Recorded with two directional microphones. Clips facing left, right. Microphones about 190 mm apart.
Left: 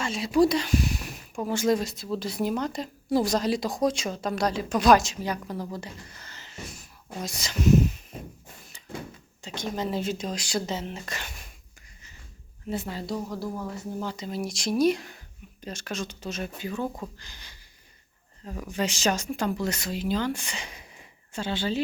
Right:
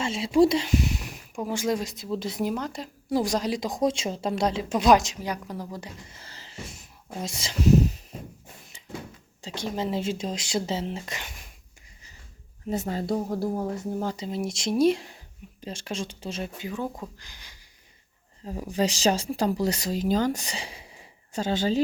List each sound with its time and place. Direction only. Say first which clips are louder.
0.0 s speech: right 2 dB; 25° right (ahead or behind)
2.5 s speech: left 2 dB; 5° right (ahead or behind); by 8.0 s 35° right (ahead or behind)
9.4 s speech: right 1 dB; 30° right (ahead or behind)
12.7 s speech: right 4 dB; 45° right (ahead or behind)
14.2 s speech: right 2 dB; 25° right (ahead or behind)
16.6 s speech: left 1 dB; 15° right (ahead or behind)
17.2 s a sound: left 1 dB; 10° right (ahead or behind)
18.4 s speech: right 3 dB; 30° right (ahead or behind)
21.3 s speech: right 4 dB; 40° right (ahead or behind)